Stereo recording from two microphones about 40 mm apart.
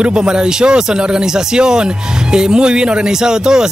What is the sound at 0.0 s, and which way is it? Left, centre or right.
A man's voice, right.